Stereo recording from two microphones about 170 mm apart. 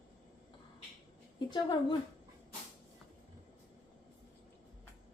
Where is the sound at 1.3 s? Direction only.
25° left (ahead or behind).